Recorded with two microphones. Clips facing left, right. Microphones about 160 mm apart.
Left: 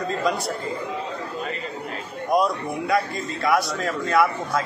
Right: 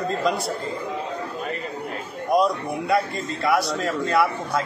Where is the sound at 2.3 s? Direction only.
Centre (ahead or behind).